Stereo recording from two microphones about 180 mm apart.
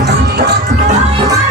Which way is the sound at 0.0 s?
65° right (ahead or behind).